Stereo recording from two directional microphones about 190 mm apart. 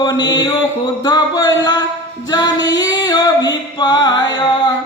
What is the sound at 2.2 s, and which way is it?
Music, 20° left (ahead or behind).